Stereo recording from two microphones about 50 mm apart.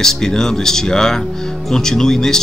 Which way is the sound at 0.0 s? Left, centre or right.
Centre.